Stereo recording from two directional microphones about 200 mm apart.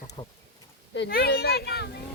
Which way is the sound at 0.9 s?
55° left (ahead or behind).